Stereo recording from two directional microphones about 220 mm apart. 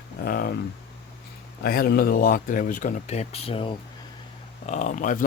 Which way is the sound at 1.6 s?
45° left (ahead or behind).